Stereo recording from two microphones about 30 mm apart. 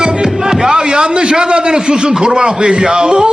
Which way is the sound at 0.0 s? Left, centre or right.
Right.